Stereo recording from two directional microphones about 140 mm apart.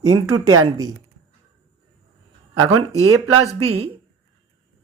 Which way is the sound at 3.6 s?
45° right (ahead or behind).